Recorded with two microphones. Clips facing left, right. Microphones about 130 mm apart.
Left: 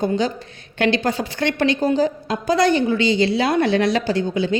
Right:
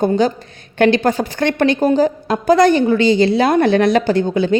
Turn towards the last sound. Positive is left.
turn(degrees=-55)  # may be behind; listen again after turning